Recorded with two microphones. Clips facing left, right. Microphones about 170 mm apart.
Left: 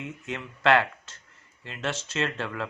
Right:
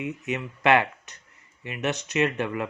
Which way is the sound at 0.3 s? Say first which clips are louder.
Right 1 dB; 20° right (ahead or behind).